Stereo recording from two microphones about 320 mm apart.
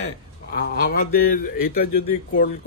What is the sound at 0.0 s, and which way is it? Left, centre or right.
A man's voice, left.